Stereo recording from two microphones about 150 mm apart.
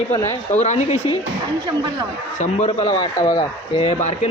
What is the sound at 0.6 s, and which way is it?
Speech, 50° left (ahead or behind).